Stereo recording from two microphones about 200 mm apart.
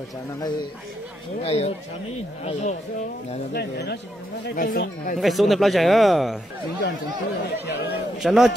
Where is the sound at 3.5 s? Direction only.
55° left (ahead or behind).